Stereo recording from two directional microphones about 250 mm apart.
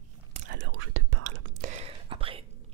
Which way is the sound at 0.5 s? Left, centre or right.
Right.